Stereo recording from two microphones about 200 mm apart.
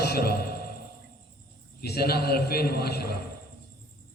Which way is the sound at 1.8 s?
50° left (ahead or behind).